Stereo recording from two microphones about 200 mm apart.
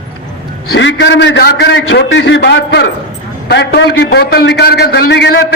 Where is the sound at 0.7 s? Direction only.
65° left (ahead or behind).